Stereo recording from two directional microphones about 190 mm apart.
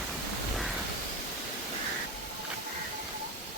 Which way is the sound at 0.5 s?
Centre (ahead or behind).